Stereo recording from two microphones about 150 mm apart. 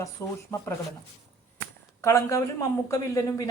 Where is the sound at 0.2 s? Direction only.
20° left (ahead or behind).